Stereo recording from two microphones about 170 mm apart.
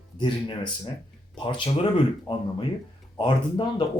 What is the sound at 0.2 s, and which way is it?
Speech, 25° left (ahead or behind).